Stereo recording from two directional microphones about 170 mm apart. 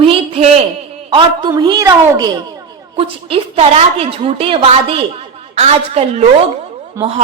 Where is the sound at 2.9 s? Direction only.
35° right (ahead or behind).